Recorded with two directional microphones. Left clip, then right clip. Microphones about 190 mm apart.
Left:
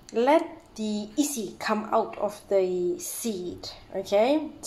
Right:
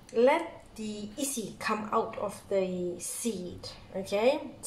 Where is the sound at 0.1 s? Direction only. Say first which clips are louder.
Left 3 dB; 50° left (ahead or behind).